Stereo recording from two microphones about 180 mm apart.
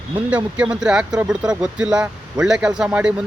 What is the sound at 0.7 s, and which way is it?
Speech, 5° right (ahead or behind).